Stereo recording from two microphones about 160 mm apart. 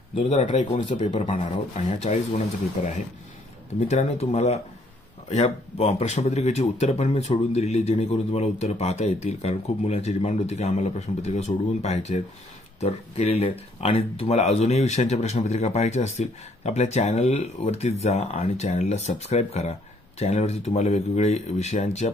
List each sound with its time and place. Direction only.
0.3 s speech: 45° left (ahead or behind)